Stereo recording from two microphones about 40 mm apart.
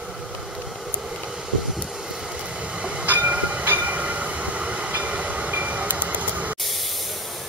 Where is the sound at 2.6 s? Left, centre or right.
Right.